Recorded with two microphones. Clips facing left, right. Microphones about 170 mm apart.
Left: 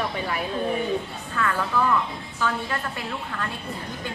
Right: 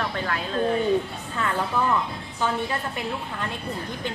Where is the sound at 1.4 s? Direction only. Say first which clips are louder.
Left 1 dB; 20° right (ahead or behind).